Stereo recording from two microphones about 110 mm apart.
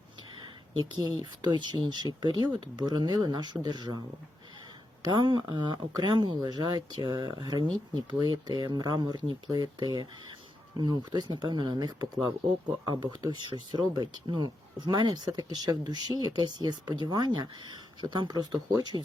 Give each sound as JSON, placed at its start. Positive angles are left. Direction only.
{"t": 0.9, "sound": "speech", "side_deg": -40}
{"t": 5.0, "sound": "speech", "side_deg": -40}